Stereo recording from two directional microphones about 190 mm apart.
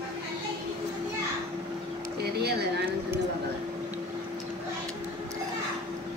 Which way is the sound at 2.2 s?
60° right (ahead or behind).